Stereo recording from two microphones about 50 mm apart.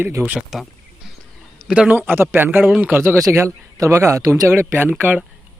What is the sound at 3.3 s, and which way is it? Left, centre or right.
Speech, right.